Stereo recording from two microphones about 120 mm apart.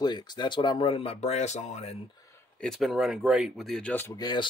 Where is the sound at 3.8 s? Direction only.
15° left (ahead or behind).